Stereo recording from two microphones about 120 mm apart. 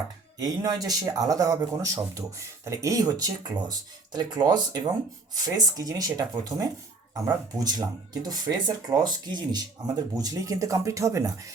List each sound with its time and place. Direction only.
0.3 s speech: 30° right (ahead or behind)